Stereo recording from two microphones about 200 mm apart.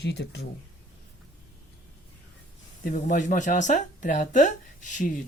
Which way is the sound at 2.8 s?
40° left (ahead or behind).